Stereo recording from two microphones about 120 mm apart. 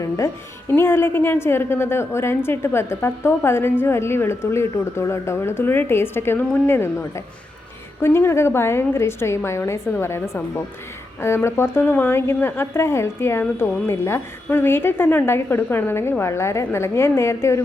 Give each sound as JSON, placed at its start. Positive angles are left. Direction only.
{"t": 0.7, "sound": "a woman's voice", "side_deg": 20}